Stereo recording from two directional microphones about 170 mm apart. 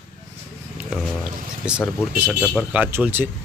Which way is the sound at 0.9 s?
5° right (ahead or behind).